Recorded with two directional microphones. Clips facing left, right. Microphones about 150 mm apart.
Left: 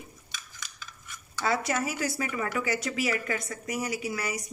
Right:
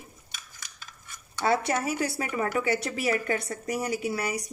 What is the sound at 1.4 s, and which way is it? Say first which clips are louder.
A woman's voice: right 3 dB; 30° right (ahead or behind).